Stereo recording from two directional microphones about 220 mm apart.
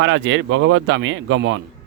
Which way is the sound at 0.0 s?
60° right (ahead or behind).